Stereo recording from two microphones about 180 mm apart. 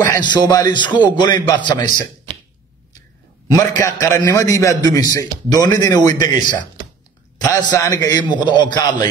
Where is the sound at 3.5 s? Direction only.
20° left (ahead or behind).